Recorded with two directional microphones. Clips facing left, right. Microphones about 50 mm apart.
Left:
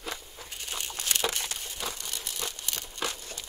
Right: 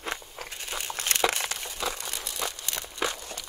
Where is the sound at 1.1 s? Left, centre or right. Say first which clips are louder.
Right 4 dB; right.